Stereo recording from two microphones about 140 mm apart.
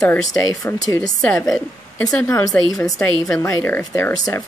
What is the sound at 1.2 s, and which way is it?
A woman's voice, 10° left (ahead or behind).